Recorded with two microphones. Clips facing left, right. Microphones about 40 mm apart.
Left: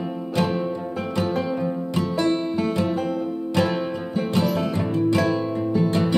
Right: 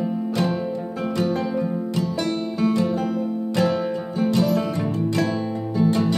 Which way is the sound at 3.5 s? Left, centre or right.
Centre.